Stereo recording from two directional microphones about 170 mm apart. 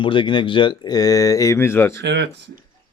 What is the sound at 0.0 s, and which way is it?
Speech, 30° left (ahead or behind).